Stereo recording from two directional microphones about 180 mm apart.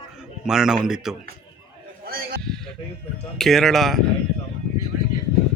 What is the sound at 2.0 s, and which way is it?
Speech, 55° right (ahead or behind).